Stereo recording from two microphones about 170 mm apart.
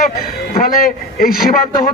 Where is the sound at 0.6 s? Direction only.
55° left (ahead or behind).